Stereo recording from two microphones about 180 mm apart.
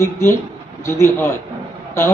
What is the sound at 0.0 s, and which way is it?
A man's voice, 15° left (ahead or behind).